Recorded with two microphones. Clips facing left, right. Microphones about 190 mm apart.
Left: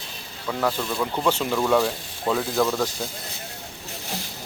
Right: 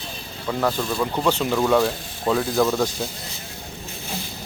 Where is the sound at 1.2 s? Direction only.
5° left (ahead or behind).